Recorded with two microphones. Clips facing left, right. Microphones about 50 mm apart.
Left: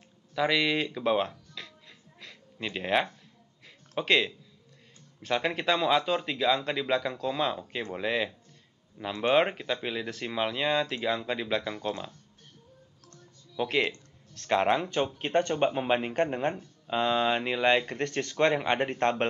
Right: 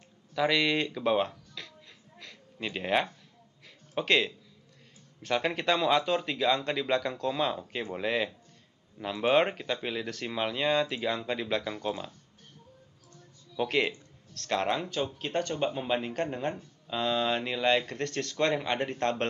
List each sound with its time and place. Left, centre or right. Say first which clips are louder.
0.3 s speech: even; centre
2.1 s a sound: even; centre
4.0 s speech: left 1 dB; centre
13.6 s speech: even; centre
14.3 s speech: left 4 dB; left